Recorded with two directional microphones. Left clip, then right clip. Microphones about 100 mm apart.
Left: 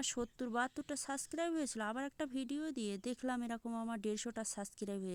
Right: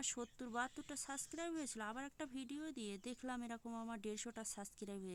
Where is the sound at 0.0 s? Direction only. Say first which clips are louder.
Left 6 dB; 45° left (ahead or behind).